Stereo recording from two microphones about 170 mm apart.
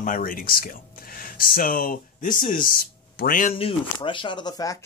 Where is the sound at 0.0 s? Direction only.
55° left (ahead or behind).